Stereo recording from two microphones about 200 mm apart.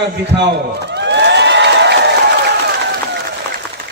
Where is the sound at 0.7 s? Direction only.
60° right (ahead or behind).